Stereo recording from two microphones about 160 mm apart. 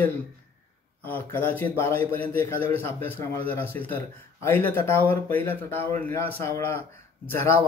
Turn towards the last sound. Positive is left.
turn(degrees=15)  # may be behind; listen again after turning